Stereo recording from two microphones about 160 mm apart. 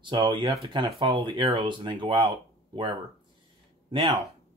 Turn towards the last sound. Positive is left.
turn(degrees=-40)  # may be behind; listen again after turning